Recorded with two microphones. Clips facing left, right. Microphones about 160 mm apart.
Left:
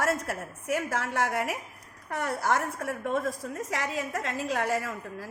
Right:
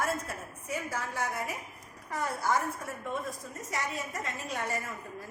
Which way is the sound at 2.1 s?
70° left (ahead or behind).